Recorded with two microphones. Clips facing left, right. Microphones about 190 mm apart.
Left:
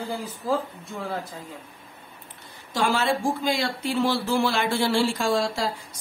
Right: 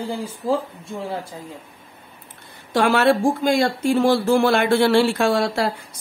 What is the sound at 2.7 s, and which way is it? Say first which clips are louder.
Speech: right 7 dB; 65° right (ahead or behind).